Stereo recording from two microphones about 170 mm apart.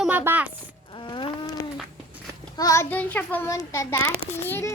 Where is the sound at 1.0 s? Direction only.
25° left (ahead or behind).